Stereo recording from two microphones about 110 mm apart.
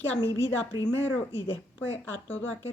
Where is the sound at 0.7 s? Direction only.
30° right (ahead or behind).